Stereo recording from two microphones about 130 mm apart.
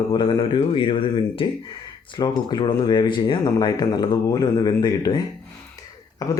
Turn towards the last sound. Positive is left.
turn(degrees=25)  # may be behind; listen again after turning